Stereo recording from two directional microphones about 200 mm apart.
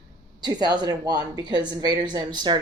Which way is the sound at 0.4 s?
20° right (ahead or behind).